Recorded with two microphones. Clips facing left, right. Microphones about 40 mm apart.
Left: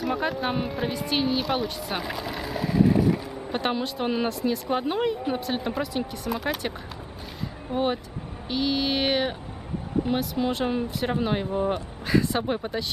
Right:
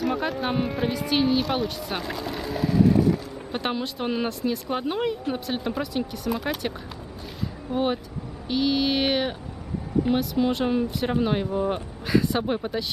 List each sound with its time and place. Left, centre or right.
0.0 s speech: centre
7.7 s speech: centre